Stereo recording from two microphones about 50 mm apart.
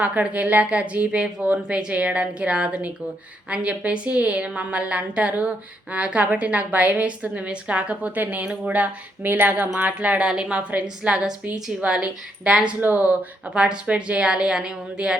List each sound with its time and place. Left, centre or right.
0.0 s a woman's voice: right
12.8 s speech: right
13.4 s a woman's voice: centre